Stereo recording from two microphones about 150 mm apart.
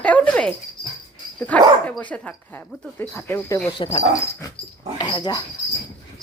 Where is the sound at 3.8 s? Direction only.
35° left (ahead or behind).